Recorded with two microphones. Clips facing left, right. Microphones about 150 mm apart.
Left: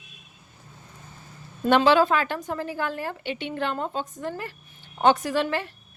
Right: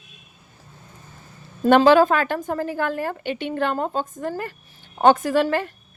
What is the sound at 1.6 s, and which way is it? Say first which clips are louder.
A woman's voice: right 5 dB; 45° right (ahead or behind).